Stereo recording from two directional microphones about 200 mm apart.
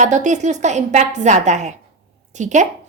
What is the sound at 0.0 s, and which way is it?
A woman's voice, 35° right (ahead or behind).